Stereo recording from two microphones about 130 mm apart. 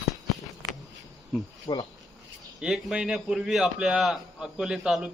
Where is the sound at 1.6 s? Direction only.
30° left (ahead or behind).